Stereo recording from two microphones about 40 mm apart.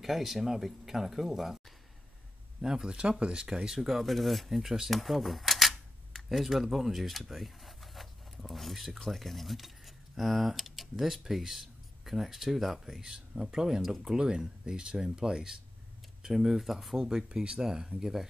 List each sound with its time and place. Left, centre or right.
0.0 s speech: centre
2.6 s speech: centre
3.8 s speech: centre
17.0 s speech: centre